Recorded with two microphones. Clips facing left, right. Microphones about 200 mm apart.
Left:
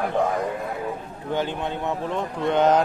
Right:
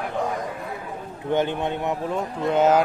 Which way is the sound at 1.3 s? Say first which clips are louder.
Right 3 dB; 20° right (ahead or behind).